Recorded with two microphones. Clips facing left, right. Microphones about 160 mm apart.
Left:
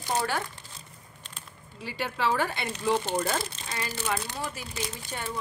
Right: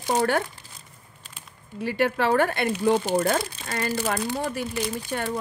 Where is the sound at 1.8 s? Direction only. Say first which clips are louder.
Right 6 dB; 60° right (ahead or behind).